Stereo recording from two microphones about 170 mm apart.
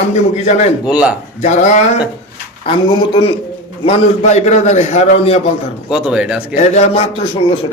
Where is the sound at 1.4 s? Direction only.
45° left (ahead or behind).